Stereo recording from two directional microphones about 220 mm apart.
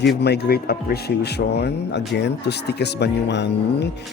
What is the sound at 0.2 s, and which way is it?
Speech, 45° left (ahead or behind).